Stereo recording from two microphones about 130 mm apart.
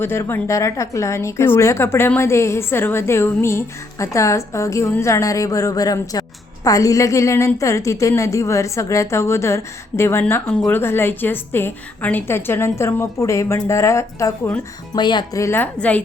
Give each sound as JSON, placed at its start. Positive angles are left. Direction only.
{"t": 0.0, "sound": "a woman's voice", "side_deg": 15}
{"t": 14.9, "sound": "a woman's voice", "side_deg": 35}